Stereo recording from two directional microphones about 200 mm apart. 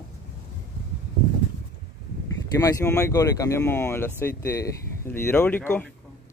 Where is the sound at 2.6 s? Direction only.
15° left (ahead or behind).